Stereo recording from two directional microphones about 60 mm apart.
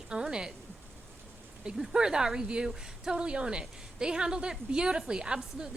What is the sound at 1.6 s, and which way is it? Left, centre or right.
A woman's voice, centre.